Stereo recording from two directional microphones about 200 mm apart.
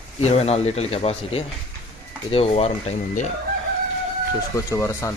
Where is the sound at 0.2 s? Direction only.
30° left (ahead or behind).